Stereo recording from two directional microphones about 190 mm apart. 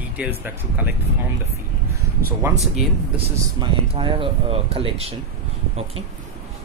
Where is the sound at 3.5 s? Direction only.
25° right (ahead or behind).